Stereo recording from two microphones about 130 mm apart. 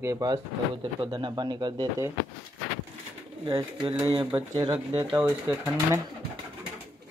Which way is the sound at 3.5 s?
35° right (ahead or behind).